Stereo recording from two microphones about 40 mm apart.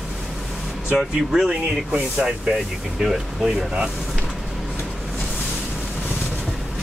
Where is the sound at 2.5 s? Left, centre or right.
Centre.